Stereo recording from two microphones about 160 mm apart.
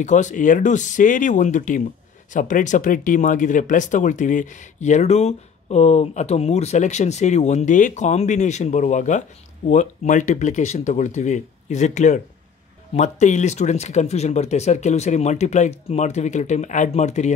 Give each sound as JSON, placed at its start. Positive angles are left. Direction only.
{"t": 0.0, "sound": "speech", "side_deg": 50}